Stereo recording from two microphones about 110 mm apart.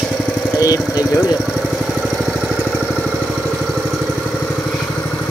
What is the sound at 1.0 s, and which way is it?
Vehicle, 10° right (ahead or behind).